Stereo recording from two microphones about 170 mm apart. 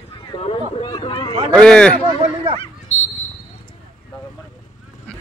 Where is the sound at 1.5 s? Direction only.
5° left (ahead or behind).